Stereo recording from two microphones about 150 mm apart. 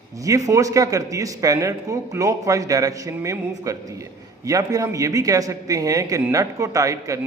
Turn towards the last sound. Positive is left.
turn(degrees=-20)  # may be behind; listen again after turning